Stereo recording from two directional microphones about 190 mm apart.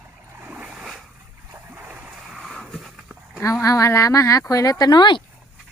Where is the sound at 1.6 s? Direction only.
10° right (ahead or behind).